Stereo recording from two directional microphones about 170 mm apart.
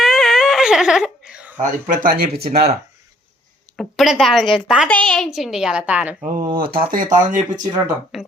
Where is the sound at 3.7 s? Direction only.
Centre (ahead or behind).